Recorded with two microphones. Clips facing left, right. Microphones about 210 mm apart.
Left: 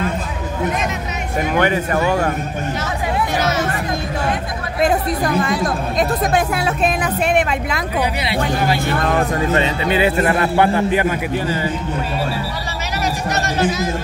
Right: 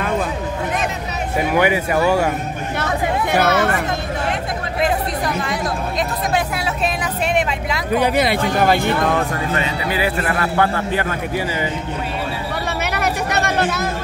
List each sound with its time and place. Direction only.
1.5 s speech: 10° right (ahead or behind)
3.3 s hubbub: 60° right (ahead or behind)
4.8 s speech: 50° left (ahead or behind)
8.0 s speech: 50° right (ahead or behind)
9.5 s a man's voice: 25° left (ahead or behind)
12.9 s a sound: 60° right (ahead or behind)